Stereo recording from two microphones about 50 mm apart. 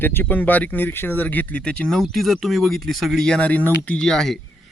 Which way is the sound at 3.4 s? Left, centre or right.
Left.